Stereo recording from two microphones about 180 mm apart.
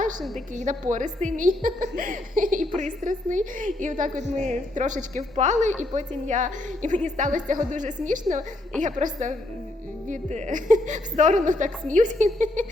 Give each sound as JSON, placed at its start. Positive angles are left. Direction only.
{"t": 0.5, "sound": "a woman's voice", "side_deg": -45}